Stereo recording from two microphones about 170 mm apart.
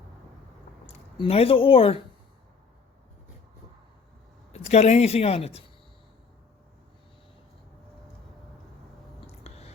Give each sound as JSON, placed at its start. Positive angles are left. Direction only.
{"t": 0.9, "sound": "speech", "side_deg": 35}
{"t": 4.5, "sound": "speech", "side_deg": 40}
{"t": 9.2, "sound": "a sound", "side_deg": 40}